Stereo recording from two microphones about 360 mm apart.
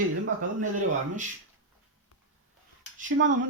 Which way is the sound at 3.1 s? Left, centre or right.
Right.